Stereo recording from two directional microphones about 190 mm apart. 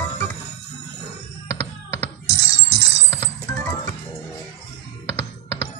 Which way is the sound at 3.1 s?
15° left (ahead or behind).